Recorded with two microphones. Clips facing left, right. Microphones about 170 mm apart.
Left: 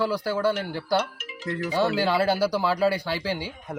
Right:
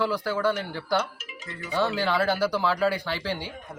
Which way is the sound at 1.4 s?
70° left (ahead or behind).